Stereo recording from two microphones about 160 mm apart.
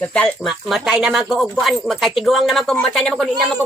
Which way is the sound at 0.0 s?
10° left (ahead or behind).